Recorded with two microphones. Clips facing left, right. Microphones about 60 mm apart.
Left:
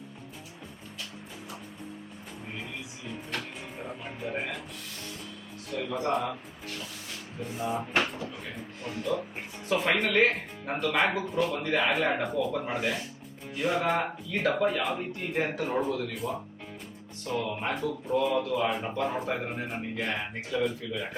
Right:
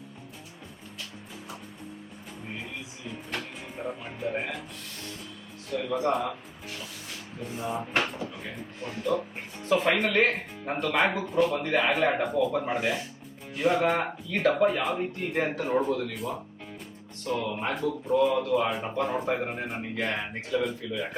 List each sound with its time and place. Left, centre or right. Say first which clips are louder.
3.8 s speech: right 4 dB; centre
5.7 s speech: right 2 dB; centre
7.5 s speech: even; centre